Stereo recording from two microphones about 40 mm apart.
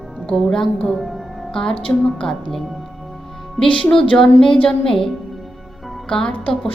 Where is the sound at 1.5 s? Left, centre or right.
Centre.